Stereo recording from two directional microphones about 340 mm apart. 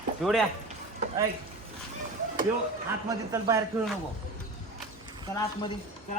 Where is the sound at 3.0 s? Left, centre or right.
Centre.